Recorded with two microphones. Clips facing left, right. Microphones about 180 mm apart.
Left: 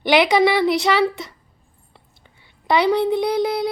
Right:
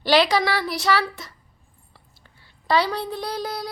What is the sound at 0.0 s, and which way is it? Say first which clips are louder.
A woman's voice: left 4 dB; 20° left (ahead or behind).